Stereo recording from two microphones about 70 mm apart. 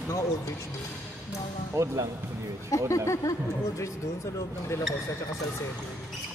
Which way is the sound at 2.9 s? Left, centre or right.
Left.